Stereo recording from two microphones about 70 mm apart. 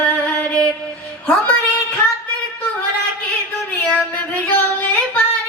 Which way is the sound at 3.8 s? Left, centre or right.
Centre.